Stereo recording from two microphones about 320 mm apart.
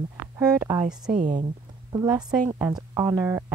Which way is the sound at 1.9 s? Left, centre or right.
Centre.